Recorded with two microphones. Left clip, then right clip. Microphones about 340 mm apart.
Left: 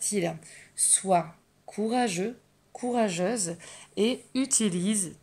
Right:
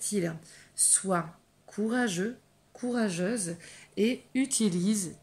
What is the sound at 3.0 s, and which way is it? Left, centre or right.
Speech, centre.